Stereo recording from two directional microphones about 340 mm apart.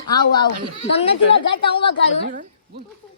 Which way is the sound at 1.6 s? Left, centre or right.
Centre.